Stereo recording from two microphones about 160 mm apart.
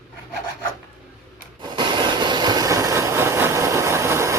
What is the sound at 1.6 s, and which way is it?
Vehicle, 30° right (ahead or behind).